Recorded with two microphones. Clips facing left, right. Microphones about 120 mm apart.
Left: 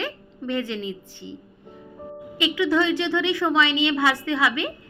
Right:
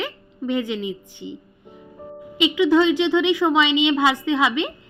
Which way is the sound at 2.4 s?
20° right (ahead or behind).